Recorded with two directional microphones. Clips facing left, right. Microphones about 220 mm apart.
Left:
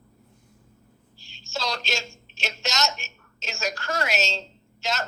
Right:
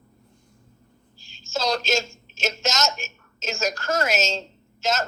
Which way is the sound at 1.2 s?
45° right (ahead or behind).